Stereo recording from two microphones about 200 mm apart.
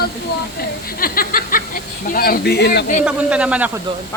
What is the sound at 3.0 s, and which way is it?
Speech, 5° right (ahead or behind).